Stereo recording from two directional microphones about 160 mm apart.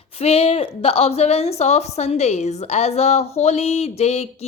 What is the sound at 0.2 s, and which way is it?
A woman's voice, 40° left (ahead or behind).